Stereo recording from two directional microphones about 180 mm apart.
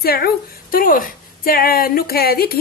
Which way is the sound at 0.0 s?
60° left (ahead or behind).